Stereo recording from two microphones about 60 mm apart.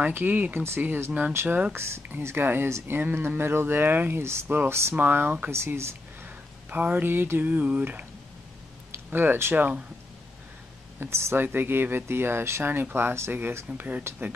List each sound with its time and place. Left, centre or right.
0.0 s speech: right
1.3 s speech: right
4.9 s speech: right
5.5 s speech: right
6.2 s speech: right
11.0 s speech: right
11.4 s speech: right